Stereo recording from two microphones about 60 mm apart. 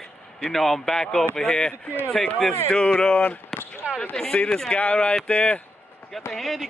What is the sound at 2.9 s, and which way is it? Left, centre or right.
Speech, left.